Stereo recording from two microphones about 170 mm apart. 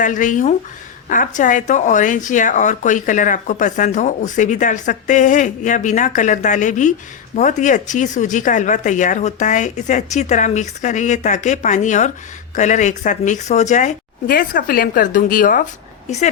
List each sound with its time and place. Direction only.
0.0 s speech: 50° left (ahead or behind)
16.0 s a woman's voice: 45° left (ahead or behind)